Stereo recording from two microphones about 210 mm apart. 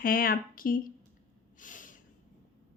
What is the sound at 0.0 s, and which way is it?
Speech, 45° left (ahead or behind).